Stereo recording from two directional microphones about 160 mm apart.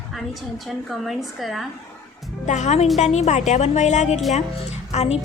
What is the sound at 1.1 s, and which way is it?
Speech, centre (ahead or behind).